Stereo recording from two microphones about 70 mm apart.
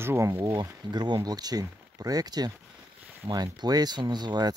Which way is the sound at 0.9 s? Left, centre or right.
Right.